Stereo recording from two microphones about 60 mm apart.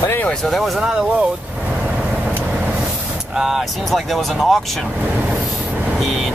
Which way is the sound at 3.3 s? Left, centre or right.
Centre.